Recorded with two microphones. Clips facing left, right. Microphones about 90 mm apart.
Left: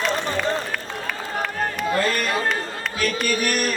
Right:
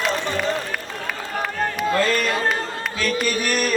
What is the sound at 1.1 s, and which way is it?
Run, 5° right (ahead or behind).